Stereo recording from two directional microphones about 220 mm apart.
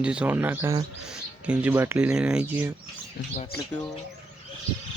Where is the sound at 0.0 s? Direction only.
5° right (ahead or behind).